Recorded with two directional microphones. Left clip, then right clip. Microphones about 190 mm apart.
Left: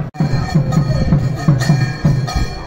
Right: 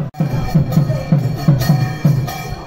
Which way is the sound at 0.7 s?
Centre (ahead or behind).